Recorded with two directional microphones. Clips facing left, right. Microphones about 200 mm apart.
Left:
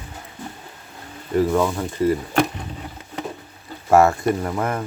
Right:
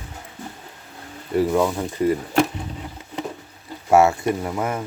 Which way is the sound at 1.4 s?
15° right (ahead or behind).